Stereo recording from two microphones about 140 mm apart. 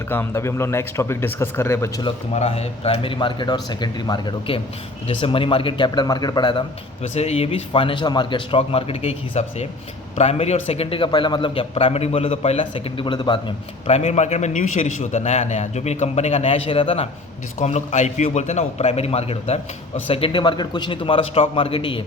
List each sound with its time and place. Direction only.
0.1 s a man's voice: 15° left (ahead or behind)
2.3 s a man's voice: 50° left (ahead or behind); by 6.7 s 35° left (ahead or behind)
7.1 s a man's voice: 50° left (ahead or behind)
13.8 s a man's voice: 45° left (ahead or behind)
17.6 s a man's voice: 55° left (ahead or behind); by 22.0 s 40° left (ahead or behind)